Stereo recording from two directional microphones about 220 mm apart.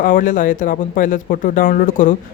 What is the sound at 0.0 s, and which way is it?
Speech, 40° left (ahead or behind).